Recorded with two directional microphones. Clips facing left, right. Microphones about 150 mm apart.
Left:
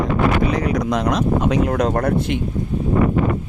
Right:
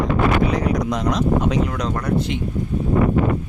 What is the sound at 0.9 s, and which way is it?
Speech, 65° left (ahead or behind).